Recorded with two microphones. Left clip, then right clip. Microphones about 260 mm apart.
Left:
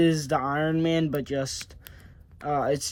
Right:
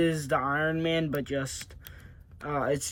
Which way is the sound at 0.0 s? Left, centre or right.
Centre.